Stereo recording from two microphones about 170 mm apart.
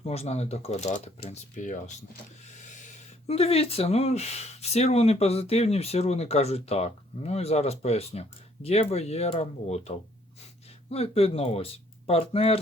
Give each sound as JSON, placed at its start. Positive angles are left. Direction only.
{"t": 0.0, "sound": "speech", "side_deg": 40}